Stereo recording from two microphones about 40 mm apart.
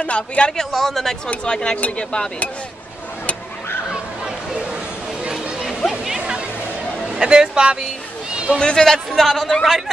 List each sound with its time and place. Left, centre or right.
0.0 s a man's voice: left
0.5 s speech: centre
1.4 s speech: left
5.9 s music: centre
7.2 s speech: right
8.5 s speech: left
8.8 s speech: centre
9.6 s speech: centre